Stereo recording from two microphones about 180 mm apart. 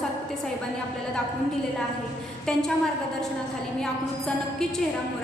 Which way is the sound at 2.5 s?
5° left (ahead or behind).